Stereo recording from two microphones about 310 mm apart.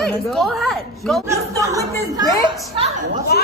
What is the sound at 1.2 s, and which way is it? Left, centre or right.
Speech, centre.